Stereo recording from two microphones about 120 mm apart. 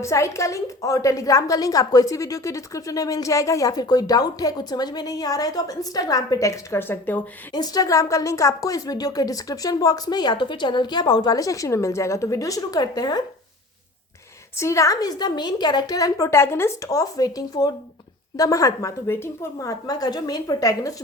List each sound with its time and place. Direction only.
0.0 s a woman's voice: 25° left (ahead or behind)
7.5 s a woman's voice: 35° left (ahead or behind)
14.5 s a woman's voice: 25° left (ahead or behind)